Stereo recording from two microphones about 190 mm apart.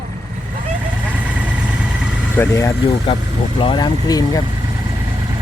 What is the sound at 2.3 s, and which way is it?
Speech, 15° left (ahead or behind).